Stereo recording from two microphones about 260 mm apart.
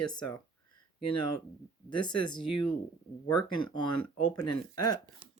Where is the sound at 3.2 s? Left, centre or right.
Centre.